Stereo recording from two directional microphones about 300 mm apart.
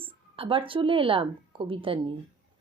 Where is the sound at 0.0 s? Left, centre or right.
Centre.